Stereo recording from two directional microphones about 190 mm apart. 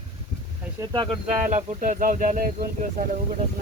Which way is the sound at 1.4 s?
40° right (ahead or behind).